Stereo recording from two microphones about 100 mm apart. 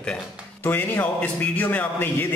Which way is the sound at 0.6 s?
20° left (ahead or behind).